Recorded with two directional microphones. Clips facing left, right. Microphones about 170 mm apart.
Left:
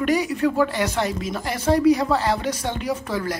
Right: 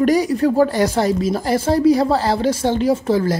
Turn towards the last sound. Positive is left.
turn(degrees=-30)  # may be behind; listen again after turning